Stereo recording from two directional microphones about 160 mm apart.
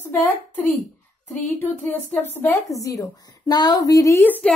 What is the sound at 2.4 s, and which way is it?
A woman's voice, 15° left (ahead or behind).